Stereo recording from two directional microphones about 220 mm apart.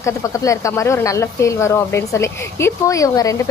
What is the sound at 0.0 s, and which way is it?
Speech, 15° left (ahead or behind).